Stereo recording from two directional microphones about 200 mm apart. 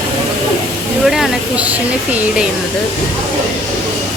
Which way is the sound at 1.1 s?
Centre (ahead or behind).